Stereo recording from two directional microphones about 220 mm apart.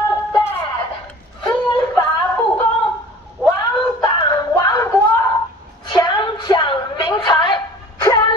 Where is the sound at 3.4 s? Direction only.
20° left (ahead or behind).